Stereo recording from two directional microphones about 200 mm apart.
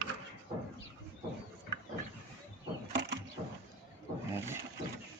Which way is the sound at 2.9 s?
60° right (ahead or behind).